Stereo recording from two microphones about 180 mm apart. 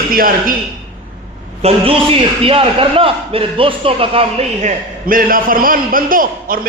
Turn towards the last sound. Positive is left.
turn(degrees=-50)  # may be behind; listen again after turning